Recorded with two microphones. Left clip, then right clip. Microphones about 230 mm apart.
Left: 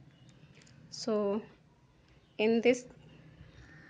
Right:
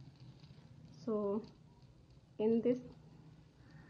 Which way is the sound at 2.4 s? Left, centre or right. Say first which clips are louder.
Left 6 dB; centre.